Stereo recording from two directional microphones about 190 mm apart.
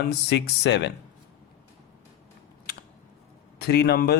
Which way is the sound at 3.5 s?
55° left (ahead or behind).